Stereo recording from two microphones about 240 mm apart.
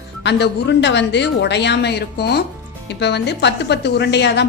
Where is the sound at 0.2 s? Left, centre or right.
Left.